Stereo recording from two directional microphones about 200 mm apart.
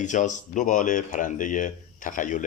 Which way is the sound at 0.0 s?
40° left (ahead or behind).